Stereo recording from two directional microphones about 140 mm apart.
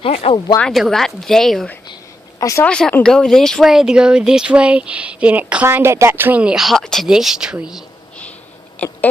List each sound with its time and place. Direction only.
0.0 s speech: 45° left (ahead or behind)
0.6 s speech: 5° left (ahead or behind)
2.4 s speech: 20° left (ahead or behind)
2.6 s speech: 5° left (ahead or behind)
8.8 s a sound: 10° left (ahead or behind)